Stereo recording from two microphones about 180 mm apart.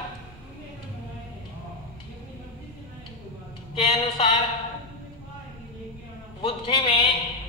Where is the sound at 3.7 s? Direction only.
30° left (ahead or behind).